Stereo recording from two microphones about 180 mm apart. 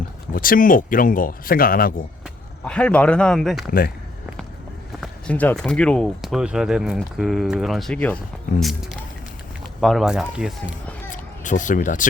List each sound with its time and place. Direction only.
0.3 s speech: 50° left (ahead or behind)
2.6 s speech: 5° left (ahead or behind)
3.7 s speech: 55° left (ahead or behind)
4.9 s speech: 5° left (ahead or behind)
11.1 s a sound: 45° left (ahead or behind)